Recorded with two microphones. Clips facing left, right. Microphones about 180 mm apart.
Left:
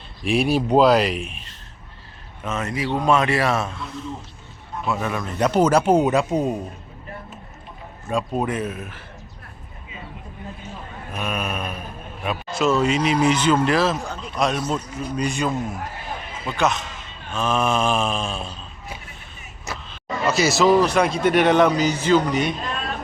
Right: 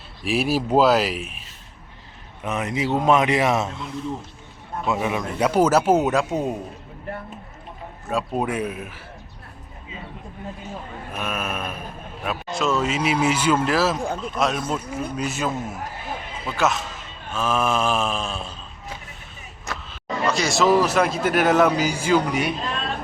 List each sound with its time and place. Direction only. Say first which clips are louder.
0.3 s a man's voice: left 2 dB; centre (ahead or behind)
2.4 s a man's voice: right 1 dB; 15° right (ahead or behind)
4.9 s a man's voice: right 1 dB; 15° right (ahead or behind); by 6.6 s centre (ahead or behind)
8.1 s speech: left 1 dB; 10° right (ahead or behind)
11.1 s a man's voice: left 1 dB; 5° right (ahead or behind)
19.7 s a sound: even; centre (ahead or behind)
20.2 s a man's voice: left 2 dB; 5° left (ahead or behind)